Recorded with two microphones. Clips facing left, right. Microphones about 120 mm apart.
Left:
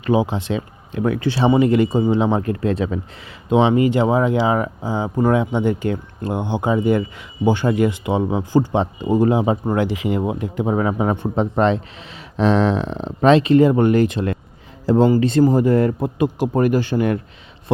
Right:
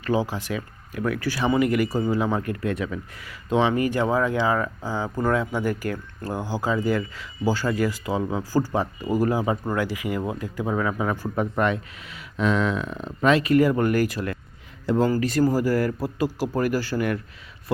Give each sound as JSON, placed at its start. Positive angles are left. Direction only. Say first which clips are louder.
{"t": 0.0, "sound": "speech", "louder": "left 6 dB", "side_deg": 20}